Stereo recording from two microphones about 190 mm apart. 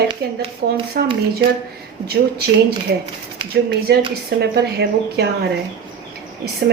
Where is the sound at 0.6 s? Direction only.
55° right (ahead or behind).